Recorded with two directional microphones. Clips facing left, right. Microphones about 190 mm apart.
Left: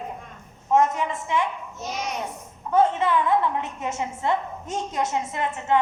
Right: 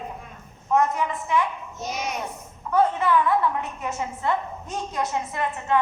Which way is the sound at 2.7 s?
20° left (ahead or behind).